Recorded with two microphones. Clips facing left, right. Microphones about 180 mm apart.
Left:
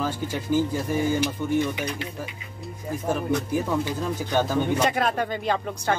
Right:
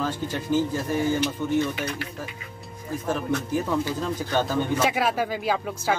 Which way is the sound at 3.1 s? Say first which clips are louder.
Left 1 dB; 15° left (ahead or behind).